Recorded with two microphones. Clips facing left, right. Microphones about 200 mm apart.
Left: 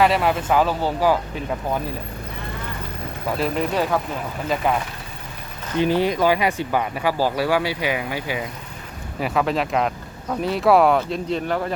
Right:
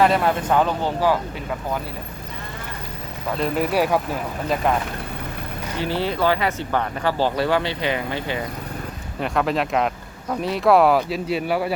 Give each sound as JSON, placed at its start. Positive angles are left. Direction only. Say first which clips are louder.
{"t": 0.0, "sound": "speech", "louder": "even", "side_deg": 5}
{"t": 3.4, "sound": "speech", "louder": "right 2 dB", "side_deg": -5}
{"t": 5.8, "sound": "speech", "louder": "left 3 dB", "side_deg": 15}